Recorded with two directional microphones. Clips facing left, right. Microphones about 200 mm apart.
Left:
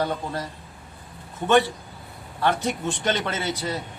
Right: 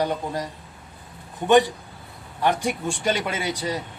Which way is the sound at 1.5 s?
15° right (ahead or behind).